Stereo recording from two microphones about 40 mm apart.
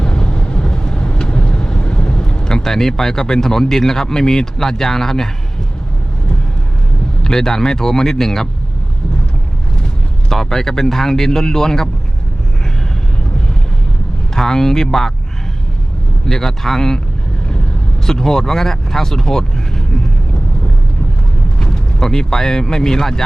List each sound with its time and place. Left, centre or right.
0.0 s vehicle: left
7.3 s speech: centre
10.2 s speech: centre
14.3 s speech: centre
16.2 s speech: centre
18.0 s speech: centre
21.6 s speech: centre